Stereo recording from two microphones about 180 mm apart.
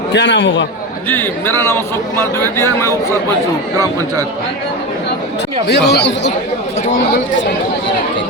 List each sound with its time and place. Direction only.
0.1 s speech: 75° left (ahead or behind)
1.1 s a man's voice: 10° left (ahead or behind)
5.6 s speech: 70° left (ahead or behind)